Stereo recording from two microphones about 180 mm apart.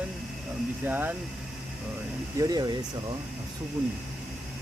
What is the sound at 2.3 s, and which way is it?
Speech, 20° right (ahead or behind).